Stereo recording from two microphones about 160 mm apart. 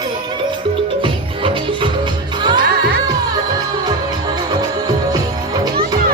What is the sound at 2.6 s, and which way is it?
Music, 85° right.